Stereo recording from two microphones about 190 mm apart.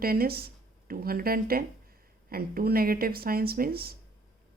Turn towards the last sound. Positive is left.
turn(degrees=-50)  # may be behind; listen again after turning